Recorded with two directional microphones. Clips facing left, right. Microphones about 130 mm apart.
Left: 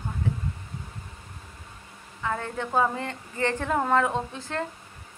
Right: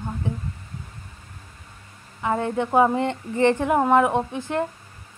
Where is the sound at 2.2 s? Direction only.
20° right (ahead or behind).